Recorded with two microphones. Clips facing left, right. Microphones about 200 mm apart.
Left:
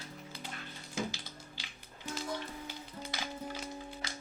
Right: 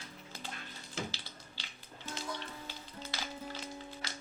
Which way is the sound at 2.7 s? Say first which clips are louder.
Left 2 dB; 15° left (ahead or behind).